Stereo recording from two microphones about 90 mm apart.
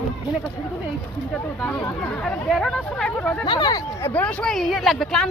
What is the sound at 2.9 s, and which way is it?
Speech, 10° left (ahead or behind).